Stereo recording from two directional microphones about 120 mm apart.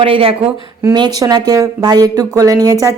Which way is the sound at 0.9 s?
35° right (ahead or behind).